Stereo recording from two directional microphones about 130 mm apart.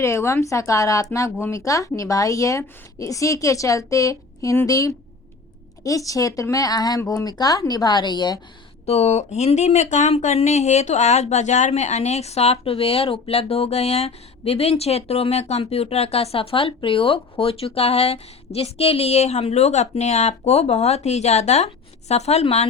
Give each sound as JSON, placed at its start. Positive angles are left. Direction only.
{"t": 0.0, "sound": "speech", "side_deg": 20}
{"t": 8.9, "sound": "speech", "side_deg": 60}